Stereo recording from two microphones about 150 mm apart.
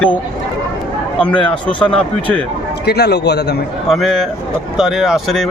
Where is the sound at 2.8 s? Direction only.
90° left.